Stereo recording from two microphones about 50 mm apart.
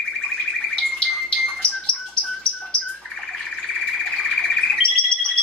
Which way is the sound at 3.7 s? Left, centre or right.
Centre.